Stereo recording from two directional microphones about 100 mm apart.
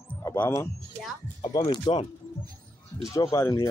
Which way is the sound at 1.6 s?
55° left (ahead or behind).